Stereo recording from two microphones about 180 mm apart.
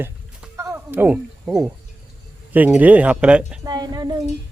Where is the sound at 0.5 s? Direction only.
10° right (ahead or behind).